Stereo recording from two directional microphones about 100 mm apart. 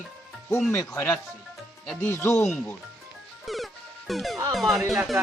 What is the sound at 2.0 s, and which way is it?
Speech, 25° left (ahead or behind).